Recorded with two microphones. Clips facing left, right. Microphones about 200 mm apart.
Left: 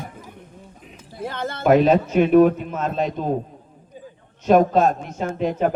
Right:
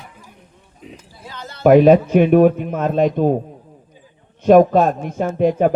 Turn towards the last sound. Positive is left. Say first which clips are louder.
# right 6 dB
turn(degrees=-50)  # may be behind; listen again after turning